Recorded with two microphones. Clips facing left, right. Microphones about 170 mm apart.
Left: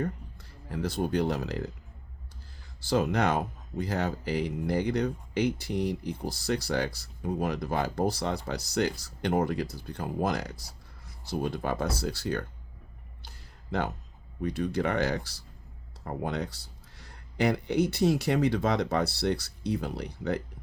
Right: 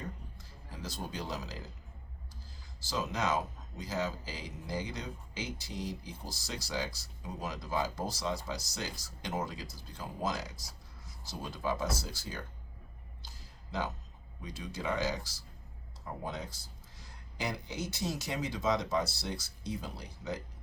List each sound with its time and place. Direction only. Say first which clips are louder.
0.0 s speech: left 11 dB; 60° left (ahead or behind)
2.8 s speech: left 8 dB; 60° left (ahead or behind)
13.2 s a sound: left 9 dB; 65° left (ahead or behind)
14.4 s speech: left 10 dB; 60° left (ahead or behind)